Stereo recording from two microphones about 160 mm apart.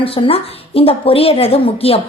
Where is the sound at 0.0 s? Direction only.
35° left (ahead or behind).